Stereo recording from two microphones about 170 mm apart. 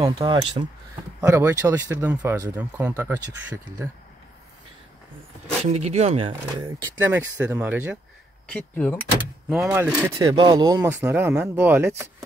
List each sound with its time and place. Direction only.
0.0 s speech: 25° right (ahead or behind)
1.2 s speech: 15° right (ahead or behind)
5.7 s speech: 40° right (ahead or behind)
7.0 s speech: 10° right (ahead or behind)
8.5 s speech: 10° left (ahead or behind)
9.2 s speech: 5° right (ahead or behind)
10.3 s speech: 25° right (ahead or behind)